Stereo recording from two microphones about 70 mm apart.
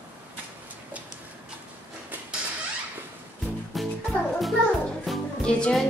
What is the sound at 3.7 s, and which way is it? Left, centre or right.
Music, centre.